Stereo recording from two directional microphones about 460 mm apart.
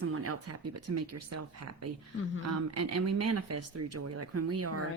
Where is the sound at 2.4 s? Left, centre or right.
Right.